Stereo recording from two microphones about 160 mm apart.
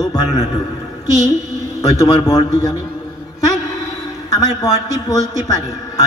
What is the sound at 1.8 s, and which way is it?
A man's voice, 20° left (ahead or behind).